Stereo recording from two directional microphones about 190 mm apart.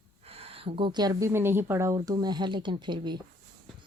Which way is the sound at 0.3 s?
30° right (ahead or behind).